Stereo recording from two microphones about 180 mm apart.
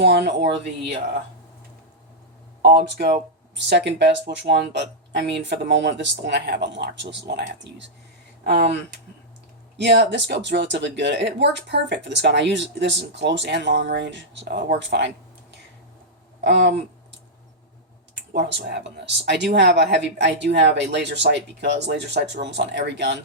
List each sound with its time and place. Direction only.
0.0 s speech: 75° right (ahead or behind)
2.6 s speech: 65° right (ahead or behind)
3.5 s speech: 75° right (ahead or behind)
9.7 s speech: 75° right (ahead or behind)
16.4 s a sound: 70° right (ahead or behind)
18.1 s speech: 75° right (ahead or behind)